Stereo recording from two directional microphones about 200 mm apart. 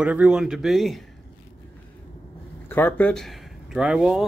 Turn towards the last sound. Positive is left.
turn(degrees=-5)  # may be behind; listen again after turning